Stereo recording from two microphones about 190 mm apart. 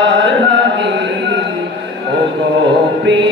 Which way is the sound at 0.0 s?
70° right (ahead or behind).